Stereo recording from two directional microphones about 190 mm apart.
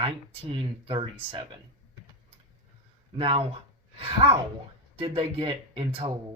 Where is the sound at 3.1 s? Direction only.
30° right (ahead or behind).